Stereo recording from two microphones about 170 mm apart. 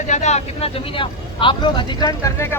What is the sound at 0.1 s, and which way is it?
Speech, 45° left (ahead or behind).